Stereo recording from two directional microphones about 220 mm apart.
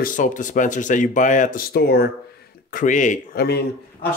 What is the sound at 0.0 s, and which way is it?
Speech, 35° left (ahead or behind).